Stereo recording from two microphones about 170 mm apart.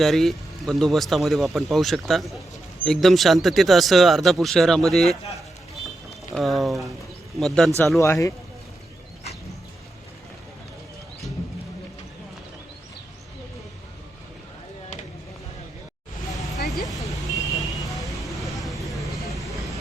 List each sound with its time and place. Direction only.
0.0 s speech: centre (ahead or behind)
6.3 s speech: centre (ahead or behind)
7.9 s speech: 15° left (ahead or behind)
16.5 s vehicle: centre (ahead or behind)